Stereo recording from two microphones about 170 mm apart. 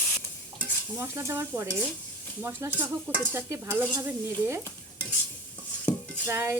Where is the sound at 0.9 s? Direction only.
15° right (ahead or behind).